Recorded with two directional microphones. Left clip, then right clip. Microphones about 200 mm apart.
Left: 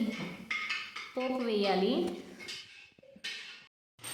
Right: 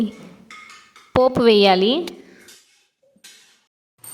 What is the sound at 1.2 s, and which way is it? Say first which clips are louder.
Speech: right 18 dB; 50° right (ahead or behind).